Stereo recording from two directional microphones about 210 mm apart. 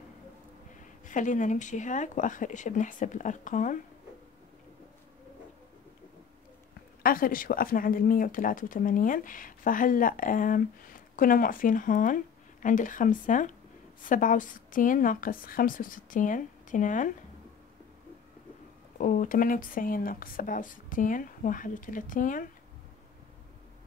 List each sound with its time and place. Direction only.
1.0 s speech: 35° left (ahead or behind)
7.0 s speech: 45° left (ahead or behind)
18.9 s speech: 40° left (ahead or behind)